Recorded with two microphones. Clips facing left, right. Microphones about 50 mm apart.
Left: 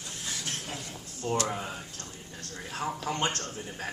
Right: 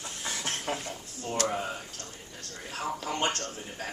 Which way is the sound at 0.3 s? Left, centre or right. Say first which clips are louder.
Right 5 dB; right.